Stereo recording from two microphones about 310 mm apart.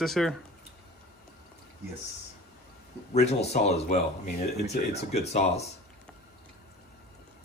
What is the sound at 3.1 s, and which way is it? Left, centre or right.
Speech, left.